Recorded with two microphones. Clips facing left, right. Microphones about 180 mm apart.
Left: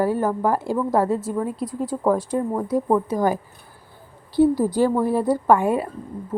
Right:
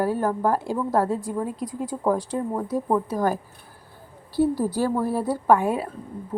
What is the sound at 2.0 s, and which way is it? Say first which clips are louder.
Speech: left 3 dB; 10° left (ahead or behind).